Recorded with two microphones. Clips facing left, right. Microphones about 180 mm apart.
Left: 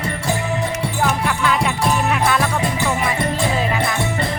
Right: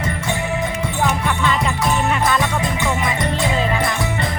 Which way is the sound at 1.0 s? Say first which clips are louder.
Even; 5° left (ahead or behind).